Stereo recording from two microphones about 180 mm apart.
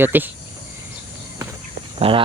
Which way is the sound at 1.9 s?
30° right (ahead or behind).